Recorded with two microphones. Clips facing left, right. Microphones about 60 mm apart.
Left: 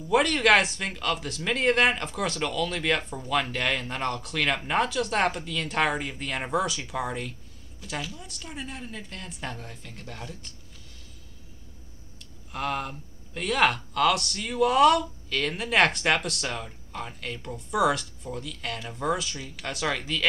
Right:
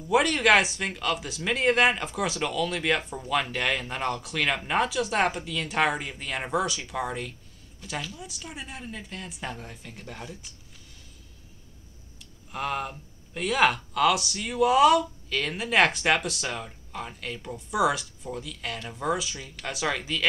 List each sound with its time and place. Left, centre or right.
0.1 s speech: centre
12.2 s speech: centre